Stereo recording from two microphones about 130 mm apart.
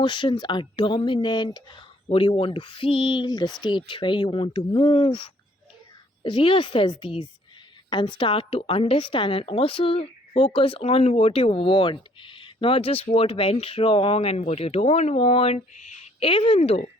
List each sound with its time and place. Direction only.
0.0 s speech: 40° left (ahead or behind)
2.0 s a woman's voice: 45° left (ahead or behind)
16.2 s a woman's voice: 40° left (ahead or behind)